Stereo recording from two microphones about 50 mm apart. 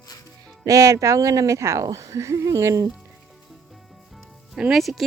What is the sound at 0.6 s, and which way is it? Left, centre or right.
Speech, right.